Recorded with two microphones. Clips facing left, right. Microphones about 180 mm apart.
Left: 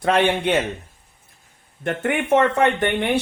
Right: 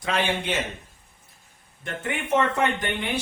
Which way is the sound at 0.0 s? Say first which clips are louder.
Left 7 dB; 60° left (ahead or behind).